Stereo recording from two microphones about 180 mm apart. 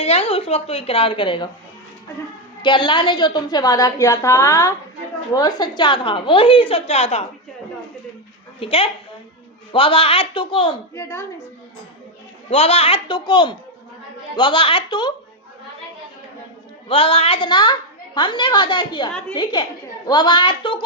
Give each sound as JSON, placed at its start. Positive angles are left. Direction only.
{"t": 0.0, "sound": "a woman's voice", "side_deg": 35}
{"t": 2.6, "sound": "a woman's voice", "side_deg": 25}
{"t": 8.6, "sound": "a woman's voice", "side_deg": 30}
{"t": 10.9, "sound": "a woman's voice", "side_deg": 15}
{"t": 12.5, "sound": "a woman's voice", "side_deg": 35}
{"t": 16.9, "sound": "a woman's voice", "side_deg": 30}